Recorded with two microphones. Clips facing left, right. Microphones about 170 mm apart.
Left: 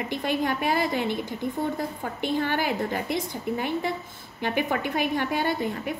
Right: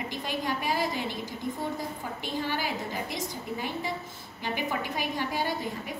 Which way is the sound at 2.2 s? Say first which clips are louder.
Left 7 dB; 60° left (ahead or behind).